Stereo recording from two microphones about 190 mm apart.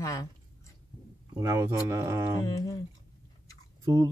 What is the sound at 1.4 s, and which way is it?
Speech, 15° right (ahead or behind).